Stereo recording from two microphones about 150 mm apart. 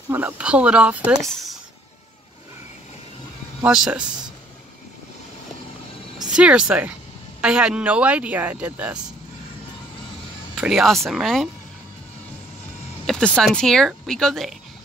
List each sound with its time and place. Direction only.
0.1 s speech: 10° right (ahead or behind)
3.6 s speech: 5° right (ahead or behind)
6.1 s speech: 5° right (ahead or behind)
10.5 s speech: 5° right (ahead or behind)
13.0 s speech: 5° left (ahead or behind)